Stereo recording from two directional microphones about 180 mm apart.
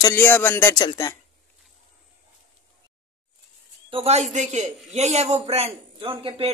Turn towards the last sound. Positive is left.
turn(degrees=-30)  # may be behind; listen again after turning